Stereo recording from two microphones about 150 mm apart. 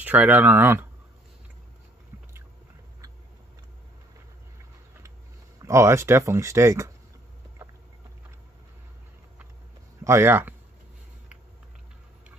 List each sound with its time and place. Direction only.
0.0 s speech: 10° right (ahead or behind)
5.6 s speech: 20° right (ahead or behind)
10.0 s speech: 15° right (ahead or behind)